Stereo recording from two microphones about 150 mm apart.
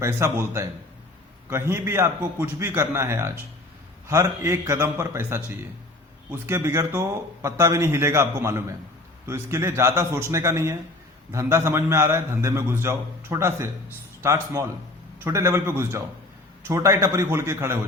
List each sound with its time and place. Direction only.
0.0 s a man's voice: 20° right (ahead or behind)
6.4 s a man's voice: 20° right (ahead or behind)